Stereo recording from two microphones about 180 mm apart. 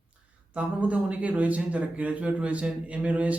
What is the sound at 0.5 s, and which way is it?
Speech, 5° right (ahead or behind).